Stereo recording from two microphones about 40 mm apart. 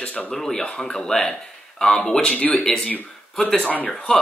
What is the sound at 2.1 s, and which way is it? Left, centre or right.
Speech, left.